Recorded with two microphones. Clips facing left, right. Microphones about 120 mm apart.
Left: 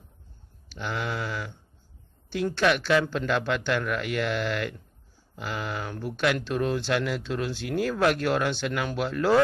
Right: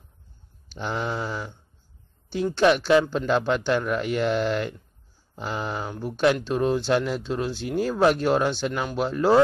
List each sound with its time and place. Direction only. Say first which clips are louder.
0.7 s speech: right 3 dB; 30° right (ahead or behind)
2.2 s speech: right 4 dB; 15° right (ahead or behind)